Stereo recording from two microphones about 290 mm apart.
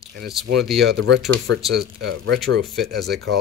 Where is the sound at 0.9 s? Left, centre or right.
Right.